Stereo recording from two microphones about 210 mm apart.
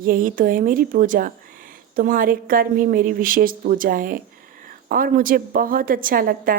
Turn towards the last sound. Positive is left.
turn(degrees=-45)  # may be behind; listen again after turning